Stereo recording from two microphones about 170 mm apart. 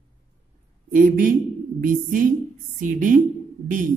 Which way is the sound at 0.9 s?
50° right (ahead or behind).